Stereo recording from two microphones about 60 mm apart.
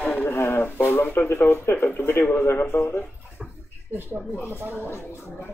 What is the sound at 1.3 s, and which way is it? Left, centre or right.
Speech, left.